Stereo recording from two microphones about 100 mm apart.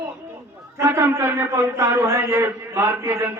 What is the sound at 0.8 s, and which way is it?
A man's voice, 30° right (ahead or behind).